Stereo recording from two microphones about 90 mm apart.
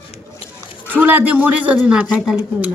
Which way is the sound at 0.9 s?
20° right (ahead or behind).